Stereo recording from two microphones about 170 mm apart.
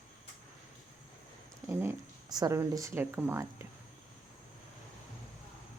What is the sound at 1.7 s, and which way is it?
Speech, 20° right (ahead or behind).